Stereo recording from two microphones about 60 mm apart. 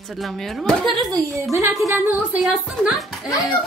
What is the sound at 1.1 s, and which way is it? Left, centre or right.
Speech, right.